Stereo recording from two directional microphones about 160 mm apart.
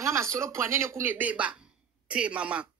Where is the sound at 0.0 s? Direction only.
15° right (ahead or behind).